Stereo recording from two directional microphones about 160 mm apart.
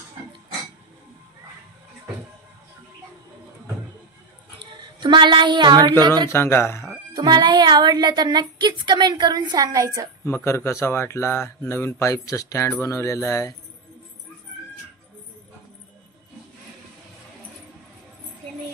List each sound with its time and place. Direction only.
4.6 s speech: 30° right (ahead or behind)
6.3 s speech: 15° left (ahead or behind)
7.2 s speech: 25° right (ahead or behind)
10.2 s speech: 15° left (ahead or behind)